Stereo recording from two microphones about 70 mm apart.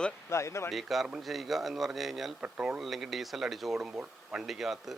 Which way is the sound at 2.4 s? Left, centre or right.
Centre.